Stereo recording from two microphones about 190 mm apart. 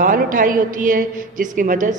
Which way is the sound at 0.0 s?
45° right (ahead or behind).